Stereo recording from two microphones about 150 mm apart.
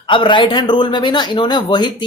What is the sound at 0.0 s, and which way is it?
Speech, 35° left (ahead or behind).